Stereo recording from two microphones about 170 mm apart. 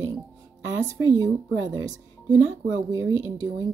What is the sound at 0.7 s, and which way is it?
Speech, 20° right (ahead or behind).